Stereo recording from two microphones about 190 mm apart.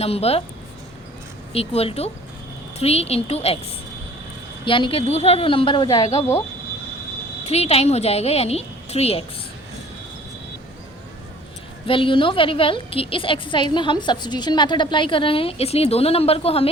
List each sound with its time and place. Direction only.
0.0 s a woman's voice: 30° left (ahead or behind)
1.5 s a woman's voice: 30° left (ahead or behind)
4.6 s a woman's voice: 25° left (ahead or behind)
7.4 s a woman's voice: 35° left (ahead or behind)
11.9 s a woman's voice: 25° left (ahead or behind)